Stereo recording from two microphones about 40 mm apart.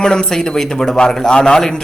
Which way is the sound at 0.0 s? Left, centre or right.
Centre.